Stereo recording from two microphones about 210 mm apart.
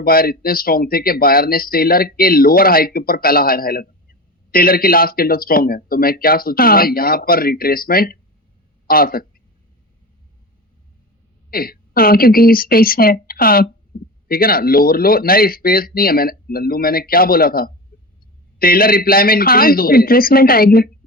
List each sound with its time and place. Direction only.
0.0 s speech: 45° left (ahead or behind)
11.5 s speech: 45° left (ahead or behind)
17.9 s a sound: 45° left (ahead or behind)
18.6 s speech: 45° left (ahead or behind)